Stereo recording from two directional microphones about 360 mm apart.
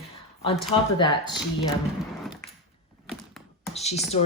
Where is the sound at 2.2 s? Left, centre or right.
Centre.